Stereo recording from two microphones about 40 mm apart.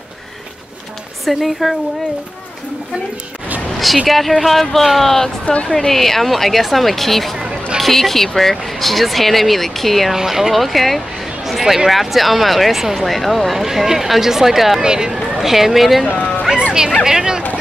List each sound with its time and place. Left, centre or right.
1.2 s speech: centre
3.7 s vehicle: centre
4.1 s speech: centre
5.4 s a woman's voice: left
5.7 s speech: centre
7.3 s a sound: centre
7.8 s speech: centre
10.1 s speech: centre
14.8 s speech: centre
15.3 s speech: centre
16.5 s music: centre
17.0 s speech: centre